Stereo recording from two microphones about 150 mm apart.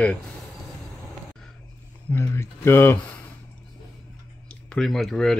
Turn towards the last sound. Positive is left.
turn(degrees=5)  # may be behind; listen again after turning